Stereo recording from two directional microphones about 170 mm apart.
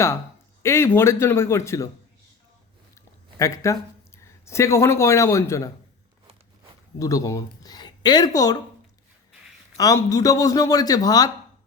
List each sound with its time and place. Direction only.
0.6 s speech: 15° left (ahead or behind)
2.9 s speech: 20° left (ahead or behind)
7.0 s speech: 20° left (ahead or behind)
9.7 s speech: 20° left (ahead or behind)